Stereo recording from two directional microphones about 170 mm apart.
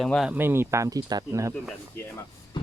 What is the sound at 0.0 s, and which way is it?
Speech, centre (ahead or behind).